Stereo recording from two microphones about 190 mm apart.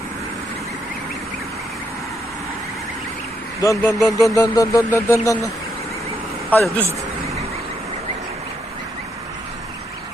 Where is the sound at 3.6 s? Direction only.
15° left (ahead or behind).